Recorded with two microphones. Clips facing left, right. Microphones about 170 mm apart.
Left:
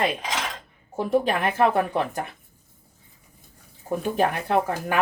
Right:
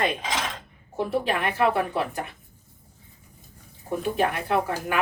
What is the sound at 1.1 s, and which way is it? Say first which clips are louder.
Speech: left 5 dB; 40° left (ahead or behind).